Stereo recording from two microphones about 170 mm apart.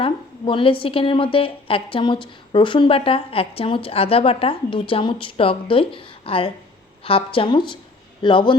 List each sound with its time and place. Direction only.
0.0 s a woman's voice: 30° left (ahead or behind)